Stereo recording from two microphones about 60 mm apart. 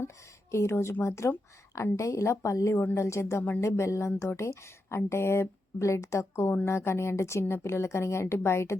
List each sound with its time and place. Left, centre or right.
0.5 s a woman's voice: left